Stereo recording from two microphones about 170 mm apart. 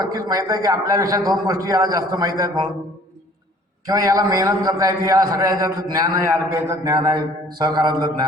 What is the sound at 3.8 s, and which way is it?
A man's voice, 20° right (ahead or behind).